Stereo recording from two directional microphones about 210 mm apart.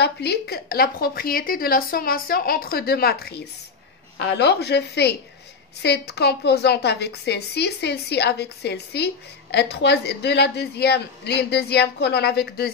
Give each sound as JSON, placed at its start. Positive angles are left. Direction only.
{"t": 0.0, "sound": "a woman's voice", "side_deg": 50}